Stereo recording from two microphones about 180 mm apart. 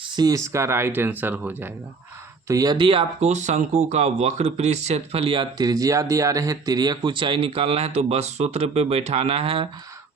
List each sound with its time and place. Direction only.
0.2 s speech: 20° right (ahead or behind)
2.5 s speech: 20° right (ahead or behind)